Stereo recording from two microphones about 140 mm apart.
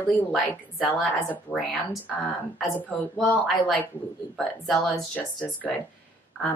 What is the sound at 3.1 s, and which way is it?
Speech, 5° left (ahead or behind).